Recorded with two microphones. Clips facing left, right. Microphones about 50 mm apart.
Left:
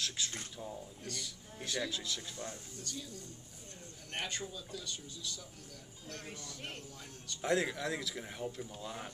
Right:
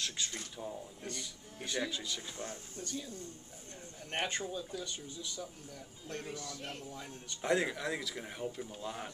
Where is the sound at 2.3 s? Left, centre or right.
Right.